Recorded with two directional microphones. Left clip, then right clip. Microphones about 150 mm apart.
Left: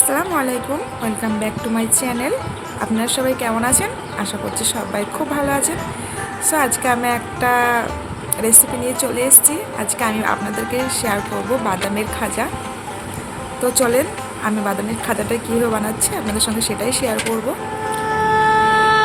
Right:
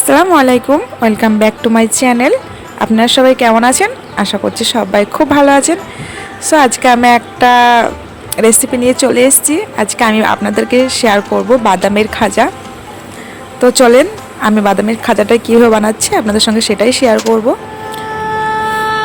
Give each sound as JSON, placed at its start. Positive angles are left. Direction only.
{"t": 0.1, "sound": "a woman's voice", "side_deg": -60}
{"t": 13.7, "sound": "a woman's voice", "side_deg": -60}
{"t": 17.8, "sound": "music", "side_deg": 0}